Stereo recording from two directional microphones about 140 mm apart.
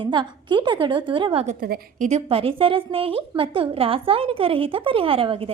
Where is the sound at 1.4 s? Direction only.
75° right (ahead or behind).